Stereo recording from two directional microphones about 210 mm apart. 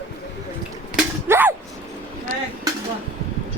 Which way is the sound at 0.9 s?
10° right (ahead or behind).